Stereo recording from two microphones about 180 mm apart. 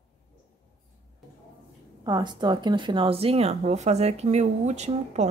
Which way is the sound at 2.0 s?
25° right (ahead or behind).